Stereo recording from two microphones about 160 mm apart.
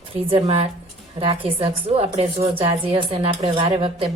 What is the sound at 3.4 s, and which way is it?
Speech, 25° right (ahead or behind).